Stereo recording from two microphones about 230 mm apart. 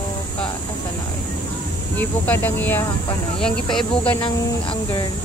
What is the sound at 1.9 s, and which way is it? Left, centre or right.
Speech, centre.